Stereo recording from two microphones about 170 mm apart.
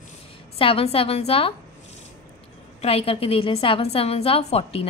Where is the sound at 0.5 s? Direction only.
35° left (ahead or behind).